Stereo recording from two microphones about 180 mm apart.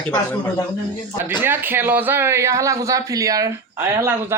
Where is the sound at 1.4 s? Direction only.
10° right (ahead or behind).